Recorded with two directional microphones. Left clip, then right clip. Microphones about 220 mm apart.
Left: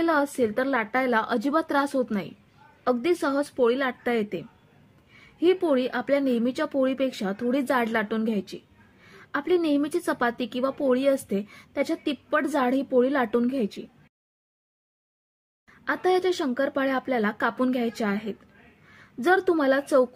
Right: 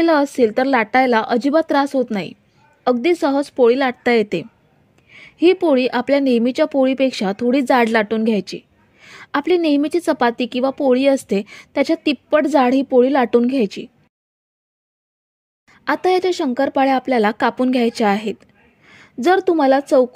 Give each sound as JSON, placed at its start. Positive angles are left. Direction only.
{"t": 0.0, "sound": "a woman's voice", "side_deg": -30}
{"t": 15.7, "sound": "a woman's voice", "side_deg": -40}